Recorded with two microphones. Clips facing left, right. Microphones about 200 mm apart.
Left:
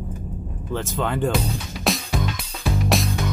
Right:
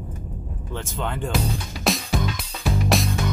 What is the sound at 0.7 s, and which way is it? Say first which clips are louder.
Speech: left 5 dB; 55° left (ahead or behind).